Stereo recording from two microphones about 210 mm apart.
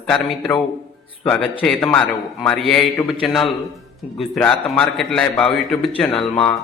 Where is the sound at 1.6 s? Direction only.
5° left (ahead or behind).